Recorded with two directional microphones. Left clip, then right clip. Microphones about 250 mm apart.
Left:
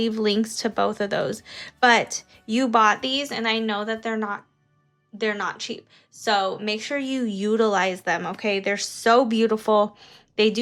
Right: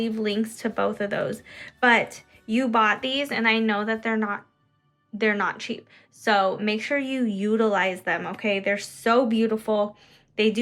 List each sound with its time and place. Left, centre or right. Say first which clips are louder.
0.0 s a woman's voice: left 4 dB; centre